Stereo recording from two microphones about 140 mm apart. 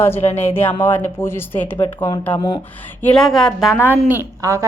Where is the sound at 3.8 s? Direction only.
15° right (ahead or behind).